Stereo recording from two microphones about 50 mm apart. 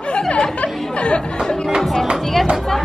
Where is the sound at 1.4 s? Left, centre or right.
Centre.